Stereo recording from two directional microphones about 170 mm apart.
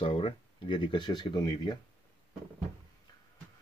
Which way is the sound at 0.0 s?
35° left (ahead or behind).